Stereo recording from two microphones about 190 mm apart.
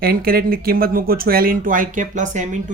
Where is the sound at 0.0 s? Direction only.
50° right (ahead or behind).